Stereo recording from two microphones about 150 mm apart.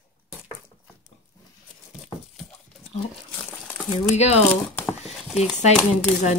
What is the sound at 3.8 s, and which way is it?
Speech, 45° left (ahead or behind).